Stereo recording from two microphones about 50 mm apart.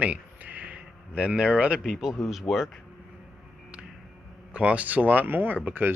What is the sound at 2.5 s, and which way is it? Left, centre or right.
Speech, centre.